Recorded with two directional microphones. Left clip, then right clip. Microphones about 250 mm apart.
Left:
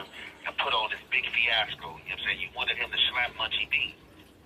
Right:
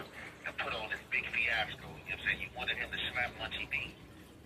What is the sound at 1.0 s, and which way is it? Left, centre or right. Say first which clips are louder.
Speech: left 4 dB; centre.